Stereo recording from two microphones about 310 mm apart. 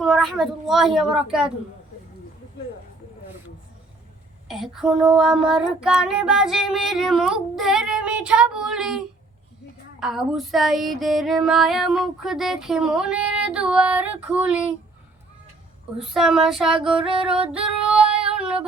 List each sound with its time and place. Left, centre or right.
0.0 s child singing: centre
4.4 s child singing: centre
16.0 s child singing: centre
17.1 s female singing: centre
18.0 s female singing: centre